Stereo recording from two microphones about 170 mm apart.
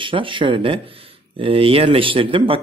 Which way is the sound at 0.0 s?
30° right (ahead or behind).